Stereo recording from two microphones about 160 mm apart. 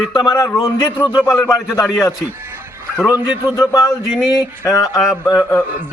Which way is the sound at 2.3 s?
15° right (ahead or behind).